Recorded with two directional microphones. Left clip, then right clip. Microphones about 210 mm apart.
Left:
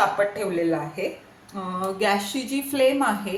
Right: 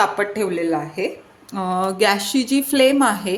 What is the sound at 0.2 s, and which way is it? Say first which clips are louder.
A woman's voice: right 2 dB; 50° right (ahead or behind).